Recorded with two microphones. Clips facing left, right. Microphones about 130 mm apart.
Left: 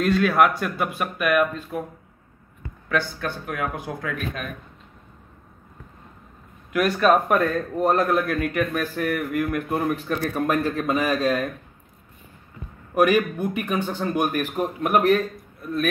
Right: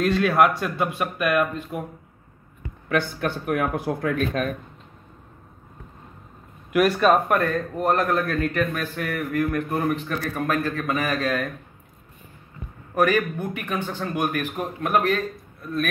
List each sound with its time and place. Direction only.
0.0 s speech: centre (ahead or behind)
2.6 s speech: 20° right (ahead or behind)
6.7 s a man's voice: 5° right (ahead or behind); by 11.4 s 15° left (ahead or behind)
12.9 s a man's voice: 15° left (ahead or behind)